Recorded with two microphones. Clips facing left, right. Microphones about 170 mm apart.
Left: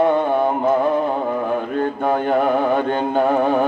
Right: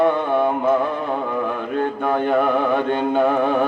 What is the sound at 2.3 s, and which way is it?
Mantra, 40° left (ahead or behind).